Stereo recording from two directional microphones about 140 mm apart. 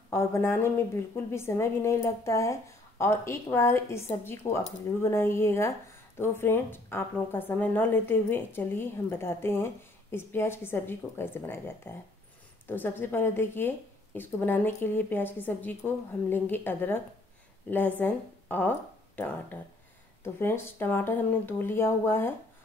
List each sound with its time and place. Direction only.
0.1 s a woman's voice: 15° left (ahead or behind)